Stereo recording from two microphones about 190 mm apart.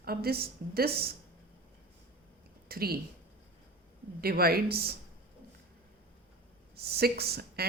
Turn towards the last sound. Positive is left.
turn(degrees=-55)  # may be behind; listen again after turning